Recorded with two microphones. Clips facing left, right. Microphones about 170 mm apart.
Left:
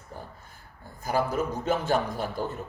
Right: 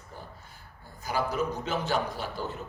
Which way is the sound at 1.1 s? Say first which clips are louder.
Left 2 dB; 50° left (ahead or behind).